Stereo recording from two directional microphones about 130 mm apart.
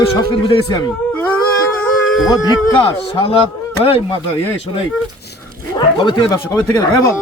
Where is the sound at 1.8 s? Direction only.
Centre (ahead or behind).